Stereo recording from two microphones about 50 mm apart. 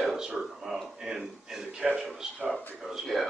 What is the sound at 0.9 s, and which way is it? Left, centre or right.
A man's voice, centre.